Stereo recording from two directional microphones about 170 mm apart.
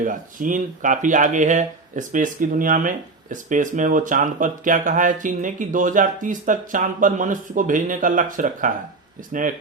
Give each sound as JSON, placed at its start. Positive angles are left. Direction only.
{"t": 0.0, "sound": "speech", "side_deg": -50}